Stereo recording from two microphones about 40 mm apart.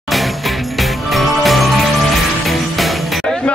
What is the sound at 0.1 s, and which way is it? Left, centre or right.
Music, centre.